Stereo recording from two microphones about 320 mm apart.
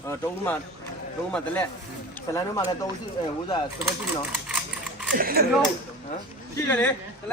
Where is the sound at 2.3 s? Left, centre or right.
Centre.